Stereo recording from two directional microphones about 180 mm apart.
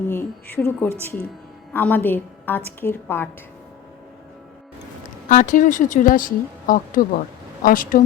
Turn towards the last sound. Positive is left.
turn(degrees=50)  # may be behind; listen again after turning